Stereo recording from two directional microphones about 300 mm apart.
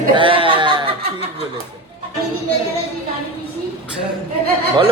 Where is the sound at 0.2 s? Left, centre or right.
Centre.